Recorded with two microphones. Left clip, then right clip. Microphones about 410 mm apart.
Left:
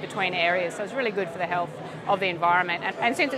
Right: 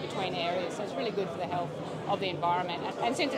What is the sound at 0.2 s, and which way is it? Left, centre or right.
Speech, left.